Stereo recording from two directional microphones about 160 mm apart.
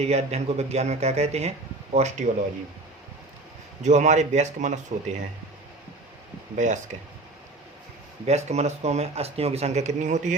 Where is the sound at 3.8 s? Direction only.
45° right (ahead or behind).